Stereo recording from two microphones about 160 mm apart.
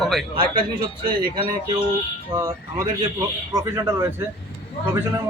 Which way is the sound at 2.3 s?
20° right (ahead or behind).